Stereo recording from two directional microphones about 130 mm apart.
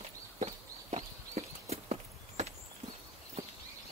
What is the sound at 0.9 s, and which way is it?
Horse, 55° right (ahead or behind).